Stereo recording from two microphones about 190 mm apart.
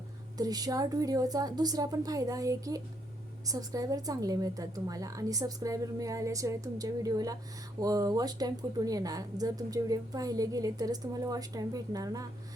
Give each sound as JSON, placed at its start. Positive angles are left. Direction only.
{"t": 0.3, "sound": "speech", "side_deg": -20}